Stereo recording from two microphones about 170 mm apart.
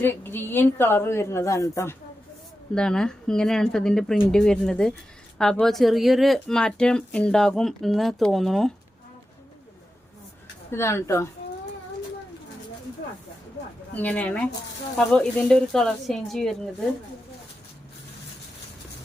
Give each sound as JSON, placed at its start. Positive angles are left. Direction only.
{"t": 0.0, "sound": "a woman's voice", "side_deg": 10}
{"t": 2.7, "sound": "speech", "side_deg": 5}
{"t": 10.7, "sound": "a woman's voice", "side_deg": 15}
{"t": 13.6, "sound": "a sound", "side_deg": 75}
{"t": 13.9, "sound": "a woman's voice", "side_deg": 10}